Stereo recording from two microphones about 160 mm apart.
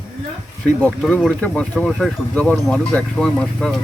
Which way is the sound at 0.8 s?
10° left (ahead or behind).